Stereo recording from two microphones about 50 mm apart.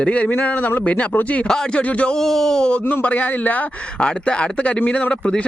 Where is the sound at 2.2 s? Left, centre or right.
Centre.